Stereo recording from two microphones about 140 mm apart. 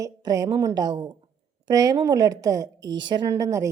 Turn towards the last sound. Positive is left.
turn(degrees=-25)  # may be behind; listen again after turning